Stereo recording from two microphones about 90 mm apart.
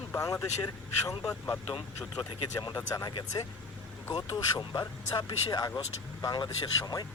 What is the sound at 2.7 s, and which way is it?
Speech, 35° left (ahead or behind).